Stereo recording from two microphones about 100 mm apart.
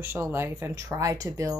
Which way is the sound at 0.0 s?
25° right (ahead or behind).